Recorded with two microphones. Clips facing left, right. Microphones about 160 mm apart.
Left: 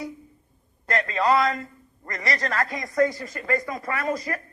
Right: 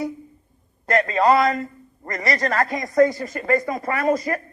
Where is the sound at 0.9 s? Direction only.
45° right (ahead or behind).